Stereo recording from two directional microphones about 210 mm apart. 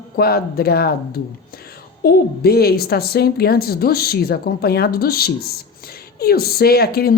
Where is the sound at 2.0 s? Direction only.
50° left (ahead or behind).